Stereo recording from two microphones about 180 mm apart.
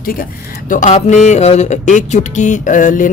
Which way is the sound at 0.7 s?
40° left (ahead or behind).